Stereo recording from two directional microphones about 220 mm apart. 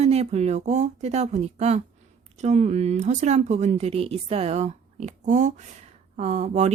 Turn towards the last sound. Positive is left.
turn(degrees=-30)  # may be behind; listen again after turning